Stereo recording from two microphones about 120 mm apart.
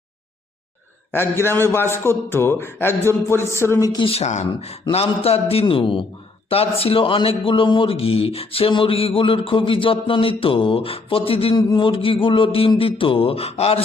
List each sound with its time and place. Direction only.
1.1 s a man's voice: 20° left (ahead or behind)
4.0 s speech: 60° left (ahead or behind)
4.4 s a man's voice: 60° left (ahead or behind)